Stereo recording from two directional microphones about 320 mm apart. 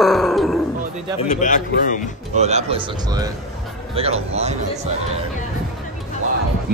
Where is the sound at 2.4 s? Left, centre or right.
Right.